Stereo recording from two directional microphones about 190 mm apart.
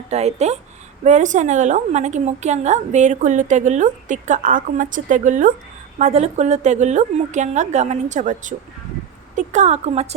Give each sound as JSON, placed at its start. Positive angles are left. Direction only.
{"t": 0.1, "sound": "a woman's voice", "side_deg": -35}